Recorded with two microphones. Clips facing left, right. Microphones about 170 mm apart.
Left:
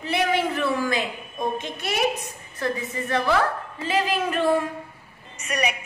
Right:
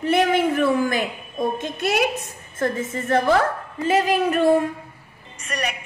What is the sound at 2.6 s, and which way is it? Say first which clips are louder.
A woman's voice: right 3 dB; 45° right (ahead or behind).